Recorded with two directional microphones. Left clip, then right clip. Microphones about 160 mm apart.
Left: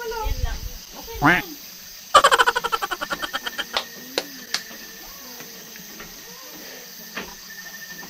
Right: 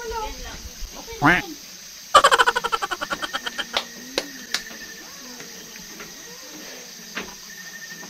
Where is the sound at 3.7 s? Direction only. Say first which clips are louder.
Right 1 dB; 30° left (ahead or behind).